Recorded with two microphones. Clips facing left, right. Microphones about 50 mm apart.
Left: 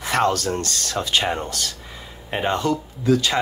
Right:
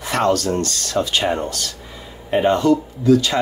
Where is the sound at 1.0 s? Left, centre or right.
Centre.